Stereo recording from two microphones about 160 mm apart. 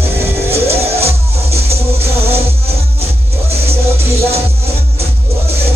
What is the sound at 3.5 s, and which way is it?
Music, 40° right (ahead or behind).